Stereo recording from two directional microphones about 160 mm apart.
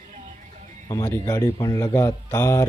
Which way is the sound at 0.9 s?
20° left (ahead or behind).